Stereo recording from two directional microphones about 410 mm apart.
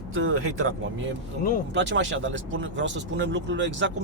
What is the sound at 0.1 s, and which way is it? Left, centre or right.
Speech, right.